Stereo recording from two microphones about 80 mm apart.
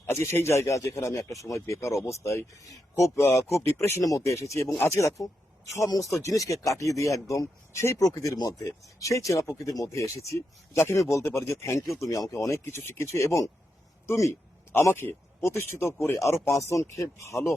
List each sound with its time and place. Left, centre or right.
0.0 s speech: left
14.7 s speech: left